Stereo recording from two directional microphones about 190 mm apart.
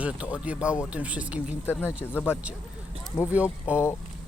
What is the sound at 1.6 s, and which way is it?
Speech, 10° left (ahead or behind).